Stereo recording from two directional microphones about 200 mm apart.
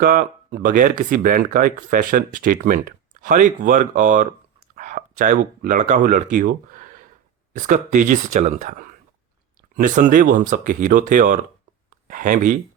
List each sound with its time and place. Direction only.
0.0 s speech: 40° right (ahead or behind)